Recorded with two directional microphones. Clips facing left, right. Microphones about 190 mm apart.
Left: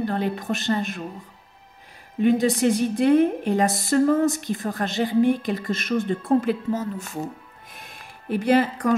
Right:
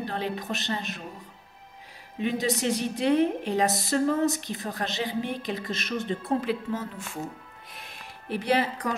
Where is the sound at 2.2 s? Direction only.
50° left (ahead or behind).